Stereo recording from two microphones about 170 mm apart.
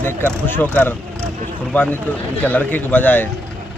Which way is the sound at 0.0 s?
15° left (ahead or behind).